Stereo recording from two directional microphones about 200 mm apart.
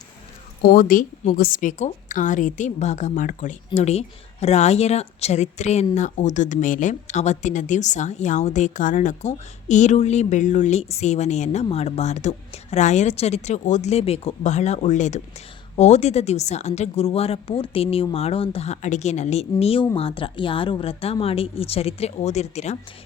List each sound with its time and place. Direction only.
0.6 s a woman's voice: 45° left (ahead or behind)